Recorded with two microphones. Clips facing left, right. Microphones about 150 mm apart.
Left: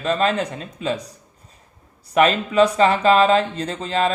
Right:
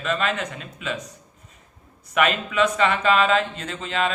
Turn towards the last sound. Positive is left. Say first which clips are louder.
# left 4 dB
turn(degrees=35)  # may be behind; listen again after turning